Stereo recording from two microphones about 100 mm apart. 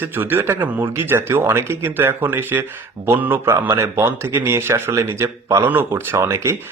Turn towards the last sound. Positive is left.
turn(degrees=-30)  # may be behind; listen again after turning